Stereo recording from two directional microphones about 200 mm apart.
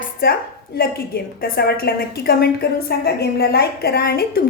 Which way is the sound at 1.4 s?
50° left (ahead or behind).